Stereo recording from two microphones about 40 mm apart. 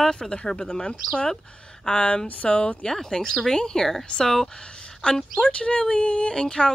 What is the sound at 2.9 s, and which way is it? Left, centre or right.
Speech, centre.